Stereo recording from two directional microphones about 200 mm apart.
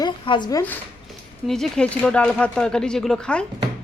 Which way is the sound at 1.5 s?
5° left (ahead or behind).